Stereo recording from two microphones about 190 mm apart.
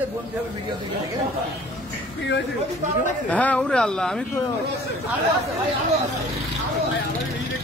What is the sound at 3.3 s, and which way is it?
Speech, 5° left (ahead or behind).